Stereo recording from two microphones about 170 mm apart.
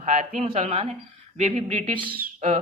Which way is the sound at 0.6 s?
35° right (ahead or behind).